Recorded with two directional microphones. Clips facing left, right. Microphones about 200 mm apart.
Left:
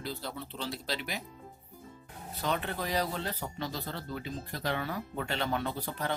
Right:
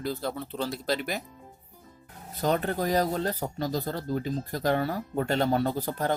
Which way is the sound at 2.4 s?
45° right (ahead or behind).